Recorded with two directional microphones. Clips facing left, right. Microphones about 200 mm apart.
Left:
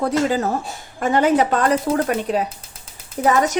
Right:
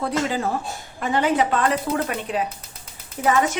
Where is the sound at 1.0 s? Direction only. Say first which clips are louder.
Left 4 dB; 45° left (ahead or behind).